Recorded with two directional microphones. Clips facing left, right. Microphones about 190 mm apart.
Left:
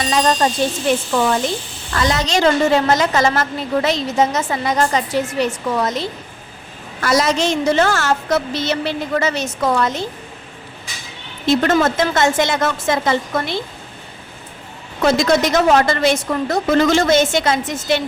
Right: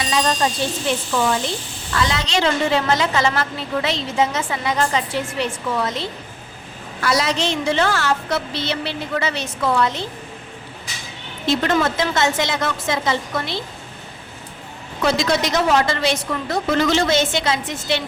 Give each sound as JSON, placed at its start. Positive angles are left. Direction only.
{"t": 0.0, "sound": "a woman's voice", "side_deg": 45}
{"t": 1.9, "sound": "a woman's voice", "side_deg": 45}
{"t": 11.4, "sound": "a woman's voice", "side_deg": 45}
{"t": 15.0, "sound": "a woman's voice", "side_deg": 50}